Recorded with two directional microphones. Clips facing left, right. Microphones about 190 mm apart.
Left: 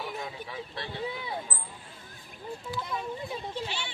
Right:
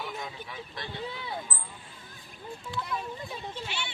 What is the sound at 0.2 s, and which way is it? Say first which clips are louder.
Speech: left 2 dB; 30° left (ahead or behind).